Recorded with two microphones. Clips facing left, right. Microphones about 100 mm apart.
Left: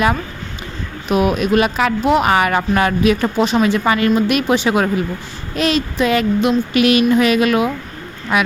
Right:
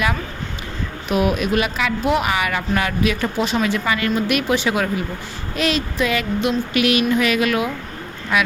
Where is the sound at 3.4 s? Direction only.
25° left (ahead or behind).